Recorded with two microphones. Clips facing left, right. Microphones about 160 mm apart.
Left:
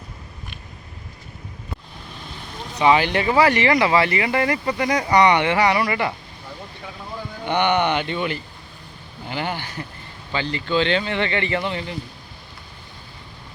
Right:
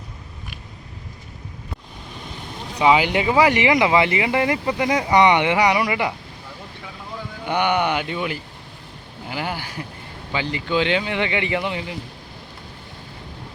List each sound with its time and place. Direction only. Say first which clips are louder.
2.7 s speech: even; 10° right (ahead or behind)
7.4 s speech: left 1 dB; 10° right (ahead or behind)